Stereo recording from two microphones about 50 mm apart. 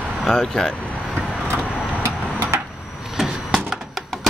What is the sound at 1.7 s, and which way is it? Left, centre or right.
Vehicle, right.